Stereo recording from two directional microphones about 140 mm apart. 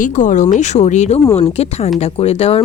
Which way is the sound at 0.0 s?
65° left (ahead or behind).